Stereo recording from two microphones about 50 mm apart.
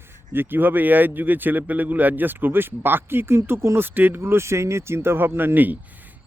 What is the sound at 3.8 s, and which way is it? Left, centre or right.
Speech, right.